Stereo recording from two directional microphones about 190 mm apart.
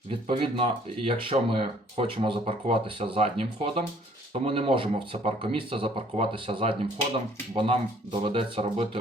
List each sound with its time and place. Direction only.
0.3 s speech: 25° right (ahead or behind)